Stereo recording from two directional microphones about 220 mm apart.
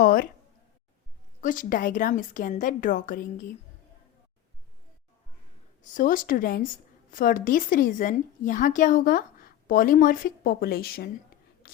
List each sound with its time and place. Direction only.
0.0 s speech: 45° left (ahead or behind)
1.4 s a woman's voice: 35° left (ahead or behind)
5.8 s a woman's voice: 35° left (ahead or behind)
11.6 s whispering: 40° left (ahead or behind)